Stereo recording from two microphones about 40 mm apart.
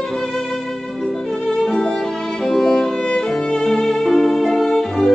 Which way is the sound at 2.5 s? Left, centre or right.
Centre.